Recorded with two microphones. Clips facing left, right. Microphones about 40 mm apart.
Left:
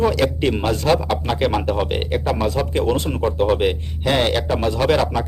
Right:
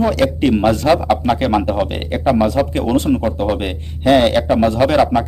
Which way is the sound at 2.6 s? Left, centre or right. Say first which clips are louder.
Right 6 dB; centre.